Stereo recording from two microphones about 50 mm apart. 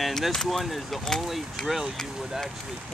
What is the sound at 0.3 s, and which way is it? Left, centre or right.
Speech, centre.